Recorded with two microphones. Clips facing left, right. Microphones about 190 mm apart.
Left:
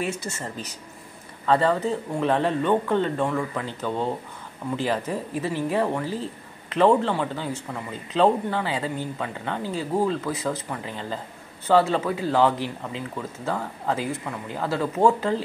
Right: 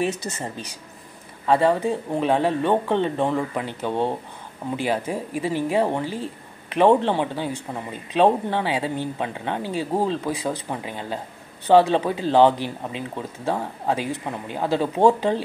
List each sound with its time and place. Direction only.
0.1 s speech: 20° right (ahead or behind)